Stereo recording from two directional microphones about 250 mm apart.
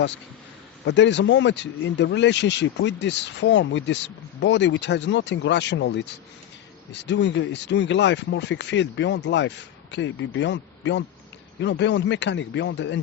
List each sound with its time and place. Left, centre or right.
0.9 s speech: left